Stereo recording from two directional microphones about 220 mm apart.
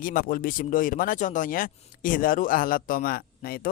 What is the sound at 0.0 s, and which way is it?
Speech, 40° left (ahead or behind).